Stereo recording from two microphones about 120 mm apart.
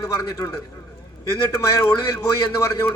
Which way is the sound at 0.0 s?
30° left (ahead or behind).